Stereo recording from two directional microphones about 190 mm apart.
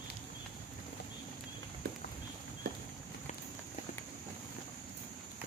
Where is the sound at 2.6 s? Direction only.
60° right (ahead or behind).